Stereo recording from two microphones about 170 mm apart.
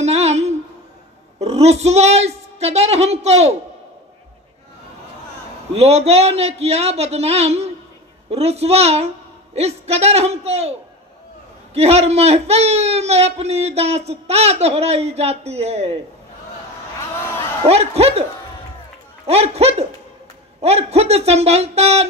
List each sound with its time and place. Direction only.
0.0 s a sound: 40° right (ahead or behind)
1.4 s a man's voice: 40° right (ahead or behind)
5.8 s a man's voice: 40° right (ahead or behind)
11.7 s a man's voice: 40° right (ahead or behind)
17.6 s a man's voice: 35° right (ahead or behind)
19.2 s a man's voice: 40° right (ahead or behind)